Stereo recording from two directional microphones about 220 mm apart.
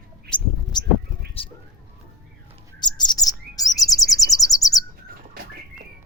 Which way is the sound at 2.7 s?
20° left (ahead or behind).